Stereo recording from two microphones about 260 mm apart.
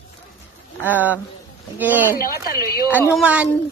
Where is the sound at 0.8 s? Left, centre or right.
Centre.